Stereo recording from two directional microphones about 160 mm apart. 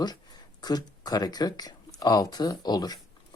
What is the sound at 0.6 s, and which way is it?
Speech, 25° left (ahead or behind).